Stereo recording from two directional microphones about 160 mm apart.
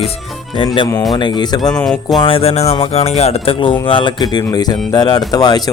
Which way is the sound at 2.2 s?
35° left (ahead or behind).